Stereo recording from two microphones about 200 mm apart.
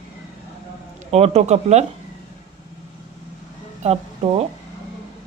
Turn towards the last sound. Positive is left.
turn(degrees=-30)  # may be behind; listen again after turning